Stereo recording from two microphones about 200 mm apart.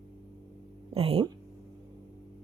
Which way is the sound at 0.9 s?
30° right (ahead or behind).